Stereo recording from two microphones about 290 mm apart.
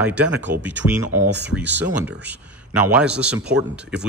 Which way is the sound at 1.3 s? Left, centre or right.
Right.